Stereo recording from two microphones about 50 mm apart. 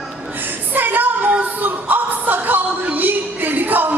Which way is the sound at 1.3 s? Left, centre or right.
Right.